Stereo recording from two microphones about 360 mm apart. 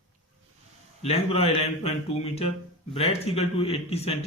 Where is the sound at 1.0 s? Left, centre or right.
Centre.